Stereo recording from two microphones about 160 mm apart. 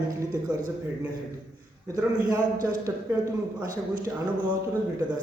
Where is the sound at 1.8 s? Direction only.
20° right (ahead or behind).